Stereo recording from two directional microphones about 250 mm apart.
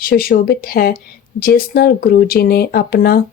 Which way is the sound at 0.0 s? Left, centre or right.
Left.